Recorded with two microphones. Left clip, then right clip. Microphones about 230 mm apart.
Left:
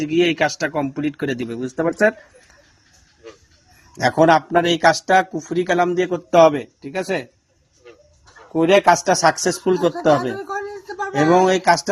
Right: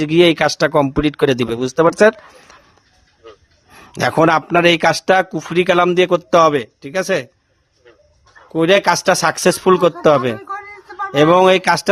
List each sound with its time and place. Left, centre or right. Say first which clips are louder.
0.0 s speech: right 5 dB; right
4.0 s speech: right 1 dB; right
8.5 s speech: right 1 dB; right
11.2 s speech: right 5 dB; right